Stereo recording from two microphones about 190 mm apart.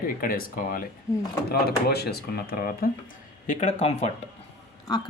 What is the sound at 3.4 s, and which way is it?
Speech, 40° left (ahead or behind).